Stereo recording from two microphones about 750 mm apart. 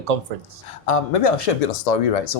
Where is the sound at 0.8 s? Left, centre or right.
Left.